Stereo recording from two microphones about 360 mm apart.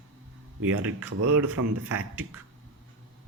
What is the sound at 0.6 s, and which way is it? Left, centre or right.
Speech, right.